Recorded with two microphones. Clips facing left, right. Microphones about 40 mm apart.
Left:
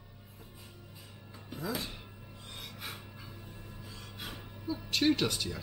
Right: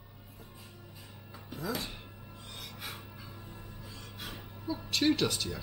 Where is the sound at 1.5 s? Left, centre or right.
Centre.